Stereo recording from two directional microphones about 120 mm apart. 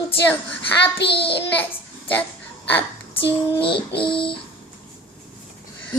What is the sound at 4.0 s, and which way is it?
Speech, 45° left (ahead or behind).